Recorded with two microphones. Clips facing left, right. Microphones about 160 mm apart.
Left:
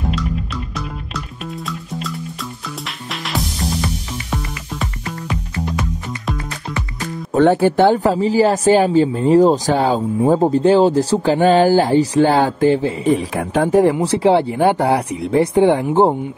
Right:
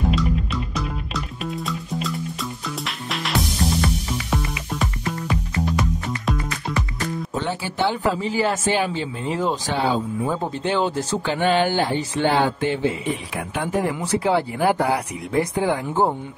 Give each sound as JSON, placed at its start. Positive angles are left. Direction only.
{"t": 1.7, "sound": "music", "side_deg": 0}
{"t": 7.3, "sound": "speech", "side_deg": 55}